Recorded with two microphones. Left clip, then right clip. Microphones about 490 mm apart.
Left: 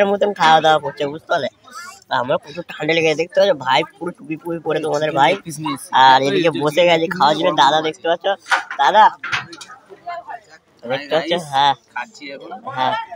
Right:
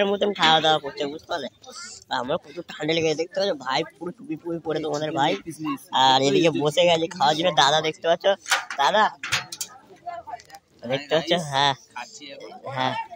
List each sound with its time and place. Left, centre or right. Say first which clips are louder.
0.0 s speech: left 6 dB; right
8.7 s speech: left 9 dB; right
9.2 s speech: left 4 dB; right
11.1 s speech: left 3 dB; right
11.9 s speech: left 9 dB; right